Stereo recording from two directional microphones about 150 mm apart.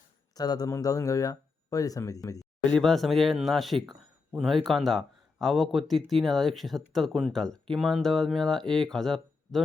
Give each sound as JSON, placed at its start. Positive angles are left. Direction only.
{"t": 0.3, "sound": "speech", "side_deg": 25}
{"t": 2.6, "sound": "a man's voice", "side_deg": 5}